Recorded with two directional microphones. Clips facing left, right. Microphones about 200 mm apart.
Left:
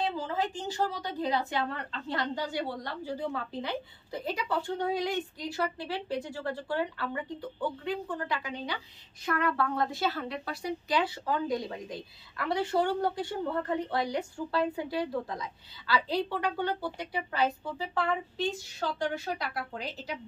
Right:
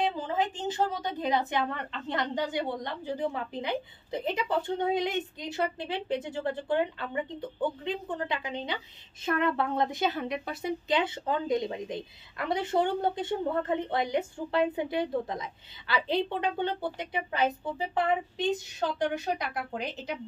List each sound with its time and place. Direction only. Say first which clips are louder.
0.0 s speech: right 2 dB; 20° right (ahead or behind)